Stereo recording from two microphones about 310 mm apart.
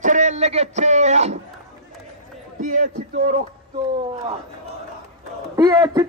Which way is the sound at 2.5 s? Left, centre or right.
Right.